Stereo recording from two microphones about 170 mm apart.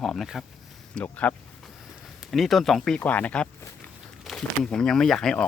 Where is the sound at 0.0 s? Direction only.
Centre (ahead or behind).